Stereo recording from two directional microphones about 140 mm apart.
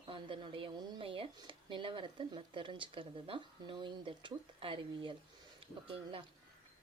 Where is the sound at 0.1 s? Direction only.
40° right (ahead or behind).